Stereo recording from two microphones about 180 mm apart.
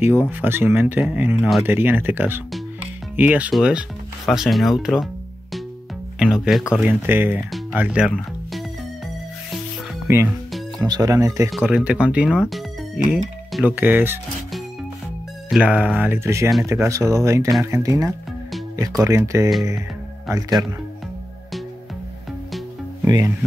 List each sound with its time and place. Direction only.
0.4 s speech: 10° right (ahead or behind)
6.1 s speech: 5° right (ahead or behind)
10.0 s speech: 15° right (ahead or behind)
11.6 s speech: 5° right (ahead or behind)
15.5 s speech: 5° right (ahead or behind)
23.0 s music: 20° right (ahead or behind)